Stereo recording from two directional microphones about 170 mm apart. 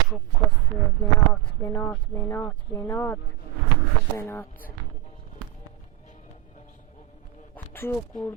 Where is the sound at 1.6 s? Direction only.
15° left (ahead or behind).